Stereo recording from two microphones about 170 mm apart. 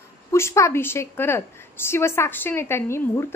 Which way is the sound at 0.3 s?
15° left (ahead or behind).